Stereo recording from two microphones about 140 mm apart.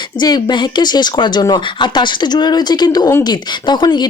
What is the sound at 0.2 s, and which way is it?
A woman's voice, 30° left (ahead or behind).